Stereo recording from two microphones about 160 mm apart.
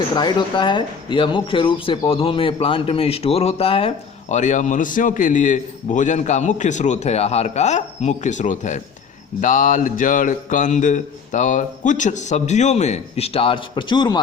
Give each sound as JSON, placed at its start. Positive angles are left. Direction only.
{"t": 0.2, "sound": "speech", "side_deg": 25}